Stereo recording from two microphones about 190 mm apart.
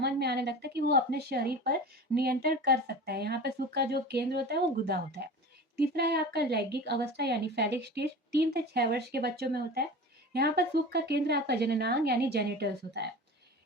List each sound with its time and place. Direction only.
0.0 s a woman's voice: 60° right (ahead or behind)